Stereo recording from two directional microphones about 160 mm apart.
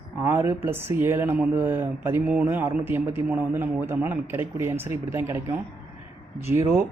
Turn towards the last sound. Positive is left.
turn(degrees=-15)  # may be behind; listen again after turning